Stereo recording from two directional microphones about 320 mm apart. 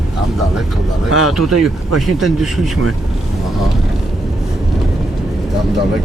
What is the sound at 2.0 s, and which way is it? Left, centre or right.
Speech, centre.